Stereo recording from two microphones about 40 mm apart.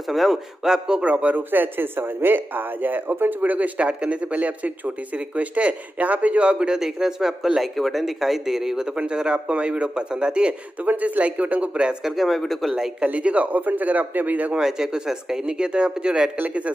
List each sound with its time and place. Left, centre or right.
0.1 s speech: centre
0.7 s speech: centre
1.0 s speech: right
6.8 s speech: centre
10.9 s speech: right
12.0 s speech: centre
13.0 s speech: right
14.6 s speech: centre